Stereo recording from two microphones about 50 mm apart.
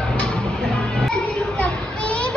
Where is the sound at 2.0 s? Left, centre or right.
Left.